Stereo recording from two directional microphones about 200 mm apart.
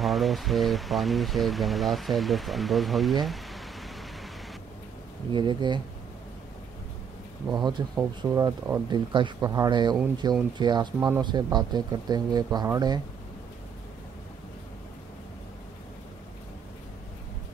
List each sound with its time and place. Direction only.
0.0 s speech: centre (ahead or behind)
5.3 s speech: 25° right (ahead or behind)
7.5 s speech: 20° right (ahead or behind)
11.0 s speech: 10° right (ahead or behind)
11.2 s speech: 20° right (ahead or behind)